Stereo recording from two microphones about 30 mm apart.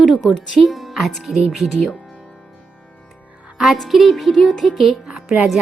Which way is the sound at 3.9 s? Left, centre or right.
Centre.